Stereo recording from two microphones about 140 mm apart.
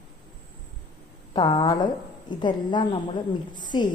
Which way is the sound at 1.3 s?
30° left (ahead or behind).